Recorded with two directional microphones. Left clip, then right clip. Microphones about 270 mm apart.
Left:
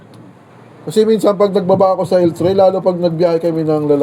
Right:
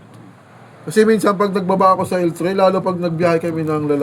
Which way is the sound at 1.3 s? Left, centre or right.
Centre.